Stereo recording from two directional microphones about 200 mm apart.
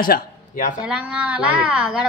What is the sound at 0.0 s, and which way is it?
Speech, 45° left (ahead or behind).